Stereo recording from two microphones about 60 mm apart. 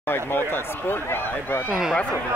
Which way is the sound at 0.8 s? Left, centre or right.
Left.